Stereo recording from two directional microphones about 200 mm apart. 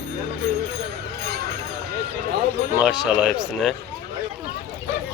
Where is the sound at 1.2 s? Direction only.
55° right (ahead or behind).